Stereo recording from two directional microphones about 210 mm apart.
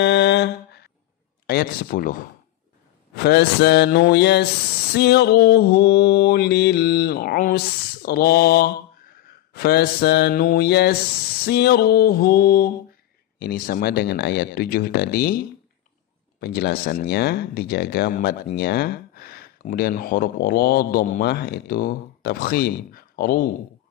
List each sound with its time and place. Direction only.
0.0 s mantra: 55° left (ahead or behind)
1.5 s speech: 45° left (ahead or behind)
3.2 s speech: 50° left (ahead or behind)